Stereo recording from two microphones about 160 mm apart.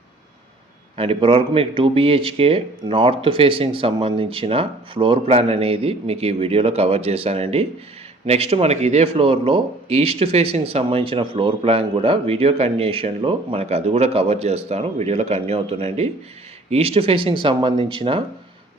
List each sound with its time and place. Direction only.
0.9 s speech: 35° right (ahead or behind)